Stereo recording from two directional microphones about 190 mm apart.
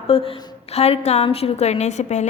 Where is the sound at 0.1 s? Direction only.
30° left (ahead or behind).